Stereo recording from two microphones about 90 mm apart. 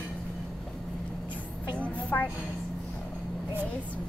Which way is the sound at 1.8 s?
20° left (ahead or behind).